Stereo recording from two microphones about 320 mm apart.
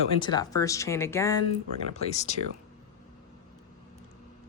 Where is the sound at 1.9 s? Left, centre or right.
Left.